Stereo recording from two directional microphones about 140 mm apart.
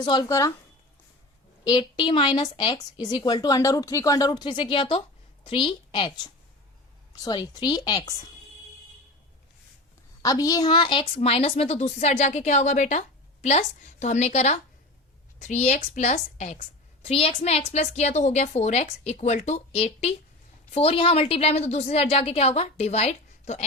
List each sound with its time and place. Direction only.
0.0 s speech: 30° left (ahead or behind)
1.6 s a woman's voice: 30° left (ahead or behind)
10.2 s a woman's voice: 25° left (ahead or behind); by 23.6 s 50° left (ahead or behind)